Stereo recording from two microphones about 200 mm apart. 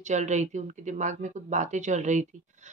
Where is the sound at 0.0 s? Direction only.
35° right (ahead or behind).